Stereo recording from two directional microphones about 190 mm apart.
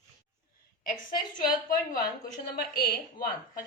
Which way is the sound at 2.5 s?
55° left (ahead or behind).